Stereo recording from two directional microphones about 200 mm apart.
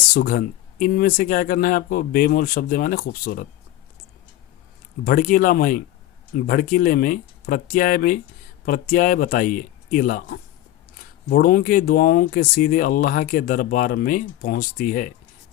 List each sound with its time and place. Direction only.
0.1 s speech: 45° left (ahead or behind)
5.0 s speech: 45° left (ahead or behind)